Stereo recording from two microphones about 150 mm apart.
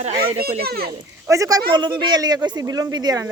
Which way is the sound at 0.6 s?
90° right.